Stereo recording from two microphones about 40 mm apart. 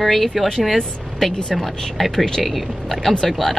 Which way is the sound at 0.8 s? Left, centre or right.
Centre.